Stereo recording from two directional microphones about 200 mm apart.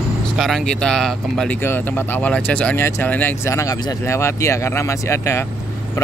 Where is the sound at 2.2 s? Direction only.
5° left (ahead or behind).